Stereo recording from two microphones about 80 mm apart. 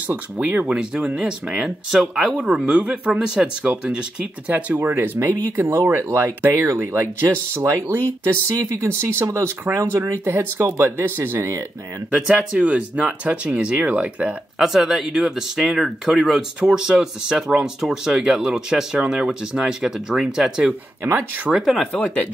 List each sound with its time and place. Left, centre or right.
0.1 s speech: centre
12.1 s speech: centre
12.5 s speech: centre
14.6 s speech: centre
21.0 s speech: right
21.5 s speech: centre
22.0 s speech: centre